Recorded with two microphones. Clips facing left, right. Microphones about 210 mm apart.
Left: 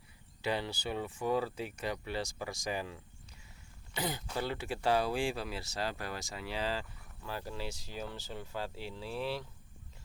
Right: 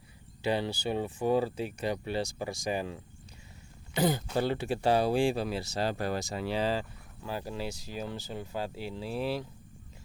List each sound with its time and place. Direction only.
0.4 s speech: 30° right (ahead or behind)
6.5 s speech: 20° right (ahead or behind)
9.0 s speech: 40° right (ahead or behind)